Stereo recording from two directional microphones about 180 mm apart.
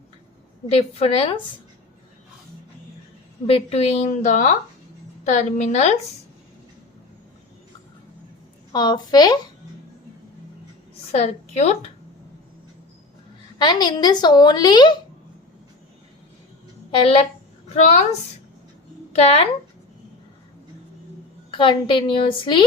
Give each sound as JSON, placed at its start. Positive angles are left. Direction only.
{"t": 0.7, "sound": "a woman's voice", "side_deg": 35}
{"t": 3.4, "sound": "a woman's voice", "side_deg": 35}
{"t": 8.7, "sound": "speech", "side_deg": 25}
{"t": 11.1, "sound": "a woman's voice", "side_deg": 35}
{"t": 13.6, "sound": "speech", "side_deg": 25}
{"t": 16.9, "sound": "a woman's voice", "side_deg": 30}
{"t": 19.1, "sound": "a woman's voice", "side_deg": 35}
{"t": 21.5, "sound": "speech", "side_deg": 25}